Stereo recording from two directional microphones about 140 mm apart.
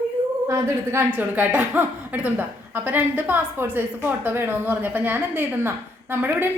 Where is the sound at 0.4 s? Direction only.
20° right (ahead or behind).